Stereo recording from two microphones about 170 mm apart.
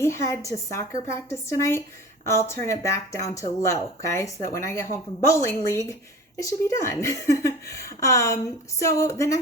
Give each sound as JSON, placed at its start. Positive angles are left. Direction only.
{"t": 0.0, "sound": "speech", "side_deg": 15}